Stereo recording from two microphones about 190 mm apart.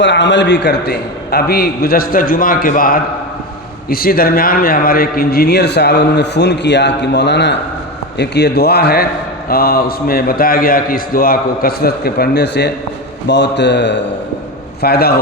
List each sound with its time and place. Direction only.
0.0 s a man's voice: 70° left (ahead or behind)
14.8 s a man's voice: 55° left (ahead or behind)